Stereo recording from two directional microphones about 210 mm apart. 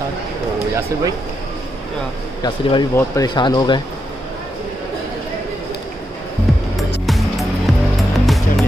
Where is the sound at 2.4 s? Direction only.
15° left (ahead or behind).